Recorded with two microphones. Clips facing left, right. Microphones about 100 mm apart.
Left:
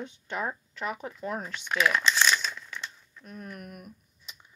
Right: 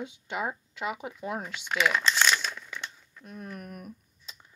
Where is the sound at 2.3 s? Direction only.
55° right (ahead or behind).